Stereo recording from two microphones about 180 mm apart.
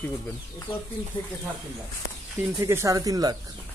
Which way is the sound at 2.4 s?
15° right (ahead or behind).